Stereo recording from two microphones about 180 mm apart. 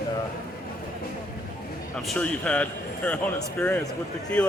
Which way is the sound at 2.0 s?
5° left (ahead or behind).